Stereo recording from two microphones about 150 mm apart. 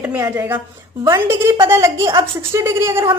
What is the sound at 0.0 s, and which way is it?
A woman's voice, 10° right (ahead or behind).